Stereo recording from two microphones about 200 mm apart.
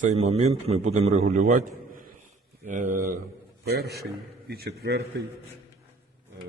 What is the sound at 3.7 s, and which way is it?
A man's voice, 50° right (ahead or behind).